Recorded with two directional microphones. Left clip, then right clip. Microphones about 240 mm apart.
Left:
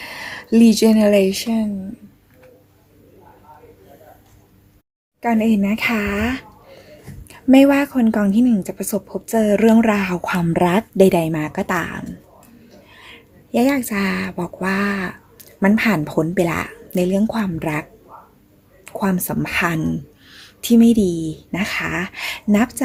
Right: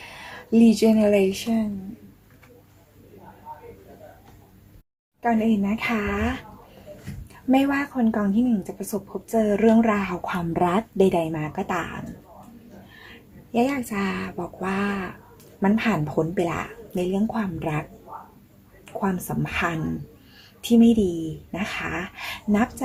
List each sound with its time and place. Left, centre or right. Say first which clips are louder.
0.0 s speech: left 9 dB; left
5.2 s speech: left 4 dB; left
7.5 s speech: left 9 dB; left
13.5 s speech: left 6 dB; left
18.9 s speech: left 5 dB; left